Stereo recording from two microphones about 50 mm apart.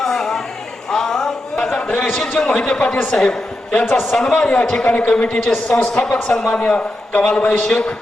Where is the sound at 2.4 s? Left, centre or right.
Centre.